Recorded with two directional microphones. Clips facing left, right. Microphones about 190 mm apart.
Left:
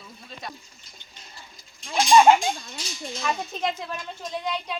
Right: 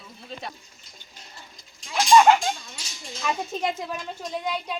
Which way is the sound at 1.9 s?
20° left (ahead or behind).